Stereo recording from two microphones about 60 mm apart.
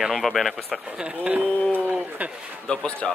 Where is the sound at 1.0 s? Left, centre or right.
Centre.